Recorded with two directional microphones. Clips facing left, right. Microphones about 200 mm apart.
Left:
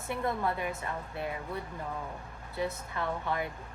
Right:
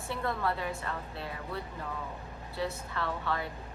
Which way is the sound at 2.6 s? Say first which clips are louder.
Left 1 dB; 15° left (ahead or behind).